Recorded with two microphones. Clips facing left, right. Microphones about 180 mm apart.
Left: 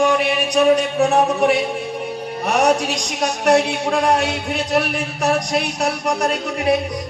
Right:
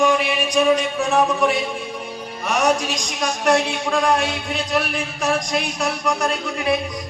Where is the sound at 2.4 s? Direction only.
65° left (ahead or behind).